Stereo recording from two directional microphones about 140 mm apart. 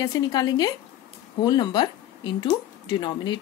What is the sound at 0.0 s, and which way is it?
Speech, 30° left (ahead or behind).